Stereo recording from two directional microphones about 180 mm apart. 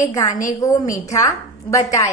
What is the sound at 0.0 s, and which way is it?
Speech, 15° left (ahead or behind).